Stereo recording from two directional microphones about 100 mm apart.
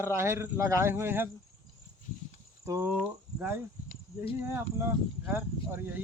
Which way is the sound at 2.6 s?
30° right (ahead or behind).